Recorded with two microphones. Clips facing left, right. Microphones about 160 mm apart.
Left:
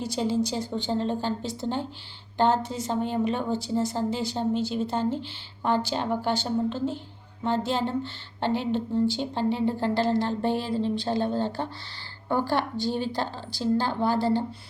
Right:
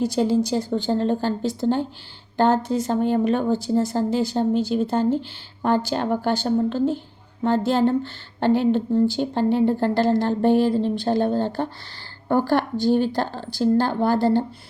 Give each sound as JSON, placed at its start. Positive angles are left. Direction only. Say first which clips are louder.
{"t": 0.0, "sound": "speech", "louder": "right 6 dB", "side_deg": -45}